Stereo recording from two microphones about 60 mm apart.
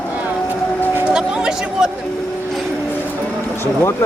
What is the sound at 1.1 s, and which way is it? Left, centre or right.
Speech, centre.